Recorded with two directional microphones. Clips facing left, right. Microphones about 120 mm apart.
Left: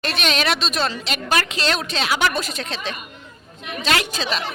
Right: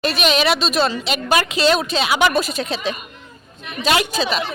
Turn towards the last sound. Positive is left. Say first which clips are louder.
# right 4 dB
turn(degrees=-10)  # may be behind; listen again after turning